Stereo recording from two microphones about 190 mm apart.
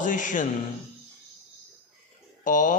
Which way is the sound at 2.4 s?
45° left (ahead or behind).